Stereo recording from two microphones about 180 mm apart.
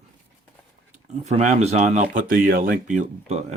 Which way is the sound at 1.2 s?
35° right (ahead or behind).